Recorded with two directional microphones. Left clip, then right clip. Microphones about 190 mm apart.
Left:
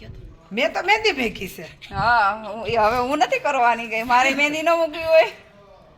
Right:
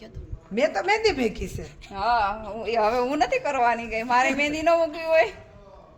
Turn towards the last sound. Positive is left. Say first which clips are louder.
# left 5 dB
turn(degrees=35)  # may be behind; listen again after turning